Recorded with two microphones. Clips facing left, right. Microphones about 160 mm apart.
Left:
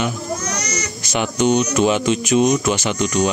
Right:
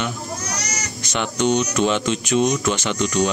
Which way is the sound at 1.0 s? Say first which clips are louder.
Left 3 dB; 10° left (ahead or behind).